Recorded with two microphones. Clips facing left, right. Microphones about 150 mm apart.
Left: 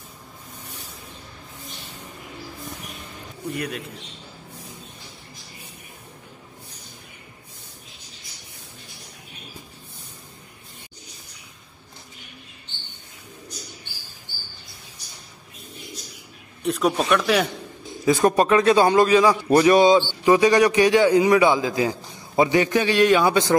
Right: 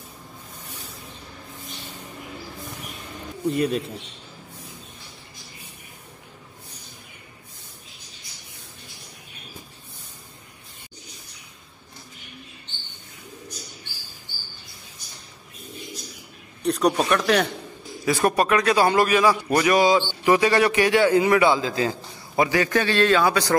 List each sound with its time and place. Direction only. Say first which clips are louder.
3.5 s a man's voice: right 7 dB; 25° right (ahead or behind)
16.6 s a man's voice: right 1 dB; centre (ahead or behind)
18.0 s a man's voice: left 3 dB; 20° left (ahead or behind)